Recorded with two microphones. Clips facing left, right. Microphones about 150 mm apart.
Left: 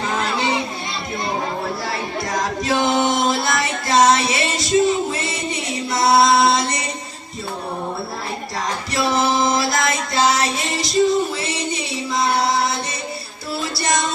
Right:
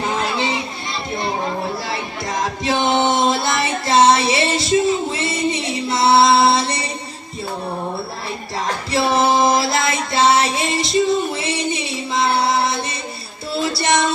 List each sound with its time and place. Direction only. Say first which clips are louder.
2.6 s music: right 1 dB; 25° right (ahead or behind)
8.9 s music: right 3 dB; 30° right (ahead or behind)